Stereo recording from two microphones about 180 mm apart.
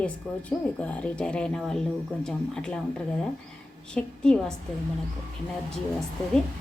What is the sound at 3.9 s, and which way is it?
Speech, 5° left (ahead or behind).